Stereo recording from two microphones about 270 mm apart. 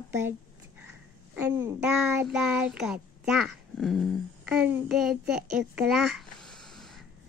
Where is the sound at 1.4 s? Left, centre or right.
Centre.